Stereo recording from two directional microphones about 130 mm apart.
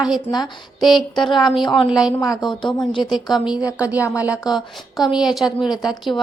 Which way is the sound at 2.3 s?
35° left (ahead or behind).